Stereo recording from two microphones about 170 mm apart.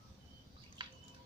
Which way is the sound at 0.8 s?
30° right (ahead or behind).